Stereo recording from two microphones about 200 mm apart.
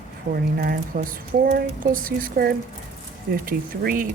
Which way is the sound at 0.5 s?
45° right (ahead or behind).